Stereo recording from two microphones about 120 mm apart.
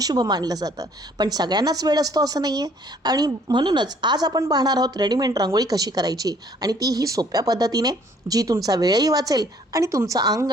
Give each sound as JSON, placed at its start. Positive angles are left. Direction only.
{"t": 0.0, "sound": "a woman's voice", "side_deg": -35}